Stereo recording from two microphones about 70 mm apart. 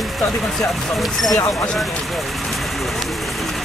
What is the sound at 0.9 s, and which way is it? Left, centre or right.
Speech, centre.